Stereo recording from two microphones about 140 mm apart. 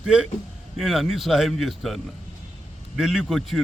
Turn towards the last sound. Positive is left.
turn(degrees=0)  # may be behind; listen again after turning